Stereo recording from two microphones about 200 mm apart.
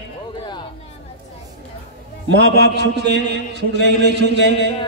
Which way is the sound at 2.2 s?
60° right (ahead or behind).